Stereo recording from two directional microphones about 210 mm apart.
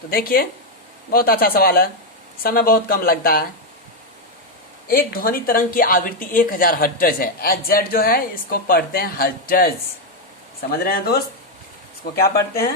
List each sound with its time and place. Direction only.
0.1 s speech: 45° left (ahead or behind)
4.9 s speech: 45° left (ahead or behind)
12.2 s speech: 45° left (ahead or behind)